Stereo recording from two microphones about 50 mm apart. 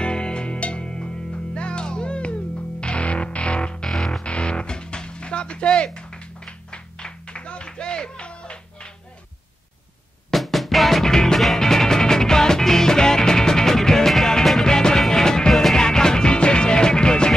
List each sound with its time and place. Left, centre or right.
0.0 s music: left
3.9 s music: centre
4.2 s music: left
10.3 s music: centre